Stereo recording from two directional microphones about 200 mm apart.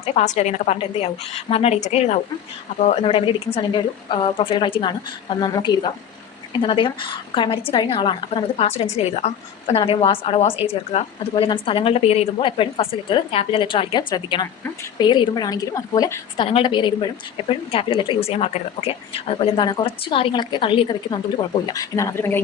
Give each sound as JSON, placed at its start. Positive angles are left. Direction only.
{"t": 0.0, "sound": "a woman's voice", "side_deg": 30}
{"t": 16.4, "sound": "speech", "side_deg": 25}